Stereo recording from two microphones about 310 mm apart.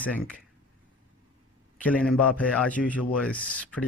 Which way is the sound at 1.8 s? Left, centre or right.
Centre.